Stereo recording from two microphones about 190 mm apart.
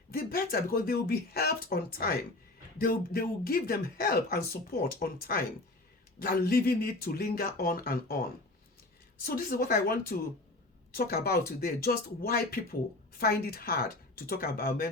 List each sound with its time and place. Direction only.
0.1 s speech: 50° left (ahead or behind)